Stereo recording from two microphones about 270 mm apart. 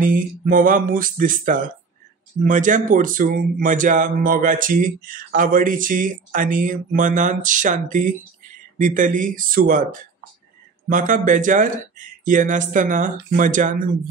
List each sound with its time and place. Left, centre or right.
0.0 s a man's voice: right
10.9 s a man's voice: right